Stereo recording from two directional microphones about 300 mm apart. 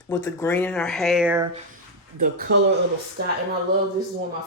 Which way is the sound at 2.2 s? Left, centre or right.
Right.